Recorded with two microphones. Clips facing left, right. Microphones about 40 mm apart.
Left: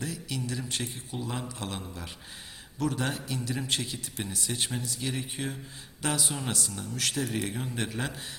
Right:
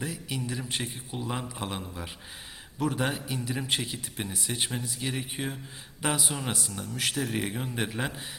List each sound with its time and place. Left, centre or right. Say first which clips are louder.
0.0 s a man's voice: right 1 dB; centre